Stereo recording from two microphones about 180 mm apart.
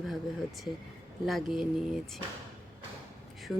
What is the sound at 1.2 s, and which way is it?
Speech, centre (ahead or behind).